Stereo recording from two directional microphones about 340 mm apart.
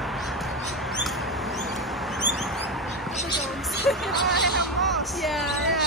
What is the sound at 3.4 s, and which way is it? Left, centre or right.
Vehicle, centre.